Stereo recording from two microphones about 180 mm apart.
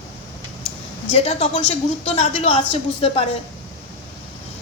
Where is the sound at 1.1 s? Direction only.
35° left (ahead or behind).